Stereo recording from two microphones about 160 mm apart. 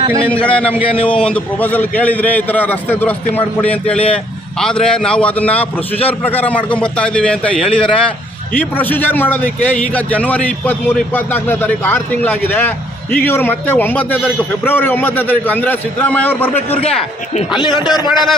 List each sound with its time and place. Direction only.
0.2 s a man's voice: 10° left (ahead or behind)
17.6 s a man's voice: 25° left (ahead or behind)